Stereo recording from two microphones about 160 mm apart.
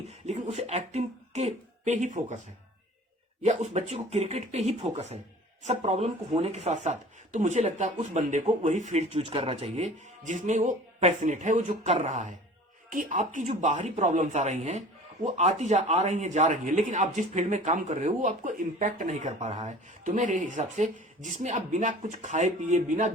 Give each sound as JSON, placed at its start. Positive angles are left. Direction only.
{"t": 0.1, "sound": "a sound", "side_deg": -45}
{"t": 0.4, "sound": "speech", "side_deg": -45}
{"t": 3.4, "sound": "speech", "side_deg": -45}